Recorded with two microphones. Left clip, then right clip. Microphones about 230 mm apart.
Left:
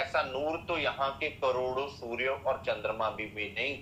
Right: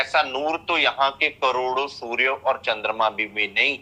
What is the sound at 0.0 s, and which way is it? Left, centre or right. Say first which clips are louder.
Speech: right 9 dB; right.